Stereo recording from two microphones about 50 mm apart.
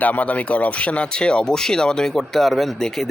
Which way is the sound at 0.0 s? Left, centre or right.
Left.